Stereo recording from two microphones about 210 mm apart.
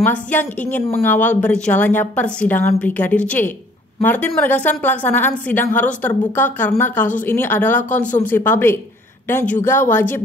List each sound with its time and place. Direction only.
0.0 s a woman's voice: 10° left (ahead or behind)